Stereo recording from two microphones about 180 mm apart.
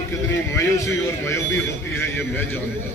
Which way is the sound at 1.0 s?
15° left (ahead or behind).